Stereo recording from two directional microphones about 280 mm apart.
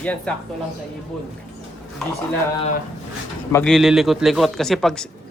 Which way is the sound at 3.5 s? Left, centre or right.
Centre.